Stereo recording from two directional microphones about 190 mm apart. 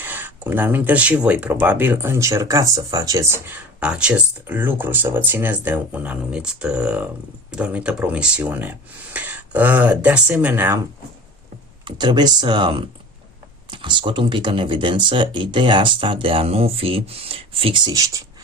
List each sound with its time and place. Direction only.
0.0 s speech: 10° right (ahead or behind)
11.9 s speech: 25° right (ahead or behind)